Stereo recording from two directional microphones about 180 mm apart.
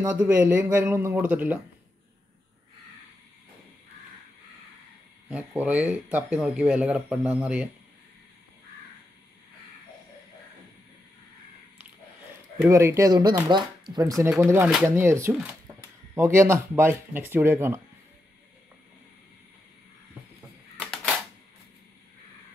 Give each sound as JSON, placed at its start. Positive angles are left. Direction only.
{"t": 0.0, "sound": "speech", "side_deg": -10}
{"t": 5.3, "sound": "speech", "side_deg": -10}
{"t": 12.6, "sound": "speech", "side_deg": -15}